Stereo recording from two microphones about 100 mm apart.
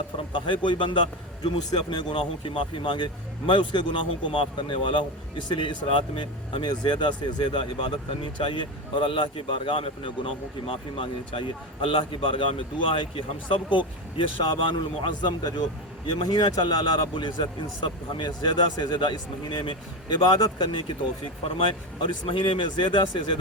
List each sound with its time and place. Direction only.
0.4 s a man's voice: 55° left (ahead or behind)
21.4 s speech: 60° left (ahead or behind)